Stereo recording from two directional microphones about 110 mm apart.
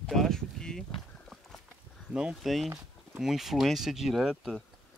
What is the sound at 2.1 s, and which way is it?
Speech, 5° right (ahead or behind).